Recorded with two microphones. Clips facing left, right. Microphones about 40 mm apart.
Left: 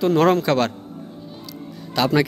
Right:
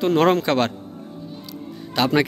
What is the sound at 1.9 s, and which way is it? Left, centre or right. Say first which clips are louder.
Speech: even; right.